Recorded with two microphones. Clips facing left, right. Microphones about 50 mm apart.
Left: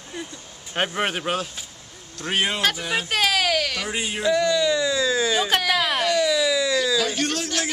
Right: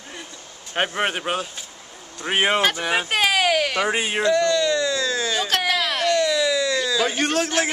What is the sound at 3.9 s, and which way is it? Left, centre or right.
Speech, right.